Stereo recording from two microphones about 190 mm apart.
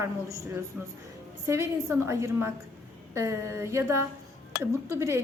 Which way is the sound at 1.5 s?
15° right (ahead or behind).